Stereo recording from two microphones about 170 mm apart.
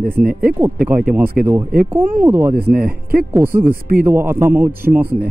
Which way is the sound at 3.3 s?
10° right (ahead or behind).